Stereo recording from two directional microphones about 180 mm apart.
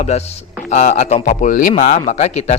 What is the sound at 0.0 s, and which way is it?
A man's voice, 35° left (ahead or behind).